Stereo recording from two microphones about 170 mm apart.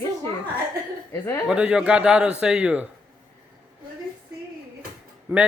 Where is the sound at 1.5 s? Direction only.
5° right (ahead or behind).